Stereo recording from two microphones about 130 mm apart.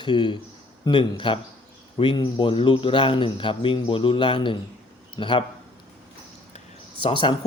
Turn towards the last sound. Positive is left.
turn(degrees=40)  # may be behind; listen again after turning